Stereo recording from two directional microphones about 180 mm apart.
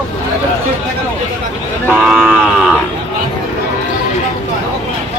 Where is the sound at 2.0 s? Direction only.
5° right (ahead or behind).